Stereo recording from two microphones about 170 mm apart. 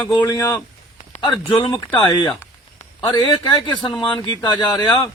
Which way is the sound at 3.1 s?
25° left (ahead or behind).